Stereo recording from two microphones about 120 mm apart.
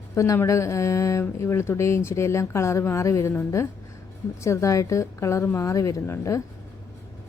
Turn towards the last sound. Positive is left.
turn(degrees=25)  # may be behind; listen again after turning